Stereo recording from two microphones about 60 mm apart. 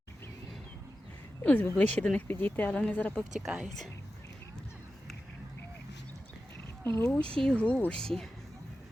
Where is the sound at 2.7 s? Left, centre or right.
Left.